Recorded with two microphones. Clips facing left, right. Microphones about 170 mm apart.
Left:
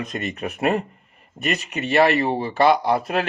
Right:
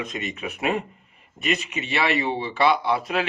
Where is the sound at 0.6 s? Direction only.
40° left (ahead or behind).